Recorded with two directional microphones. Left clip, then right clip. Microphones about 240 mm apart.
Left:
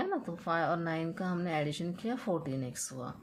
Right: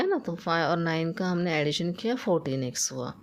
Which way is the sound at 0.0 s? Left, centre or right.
Right.